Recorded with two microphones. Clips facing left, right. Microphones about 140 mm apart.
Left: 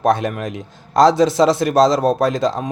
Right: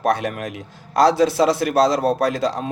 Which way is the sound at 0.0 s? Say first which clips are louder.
Left 3 dB; 25° left (ahead or behind).